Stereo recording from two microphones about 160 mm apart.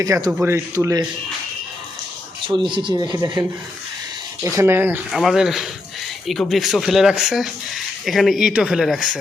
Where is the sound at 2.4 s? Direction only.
30° right (ahead or behind).